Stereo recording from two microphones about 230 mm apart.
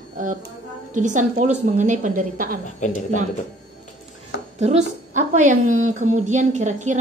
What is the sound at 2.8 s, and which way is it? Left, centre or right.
Speech, left.